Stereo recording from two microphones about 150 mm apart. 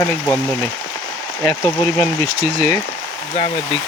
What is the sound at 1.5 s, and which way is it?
Speech, 20° left (ahead or behind).